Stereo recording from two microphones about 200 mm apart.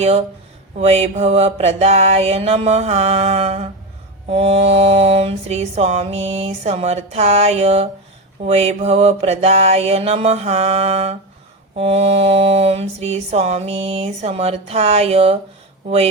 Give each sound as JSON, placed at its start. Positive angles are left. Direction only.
{"t": 0.8, "sound": "mantra", "side_deg": -30}